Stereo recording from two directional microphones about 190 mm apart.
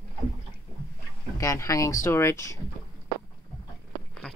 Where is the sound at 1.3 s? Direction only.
15° left (ahead or behind).